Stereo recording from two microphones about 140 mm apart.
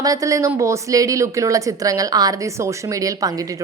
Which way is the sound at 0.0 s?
25° right (ahead or behind).